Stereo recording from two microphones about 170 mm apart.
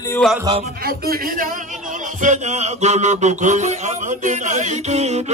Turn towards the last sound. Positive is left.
turn(degrees=-40)  # may be behind; listen again after turning